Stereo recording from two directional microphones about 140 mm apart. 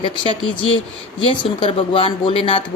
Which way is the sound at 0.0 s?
35° left (ahead or behind).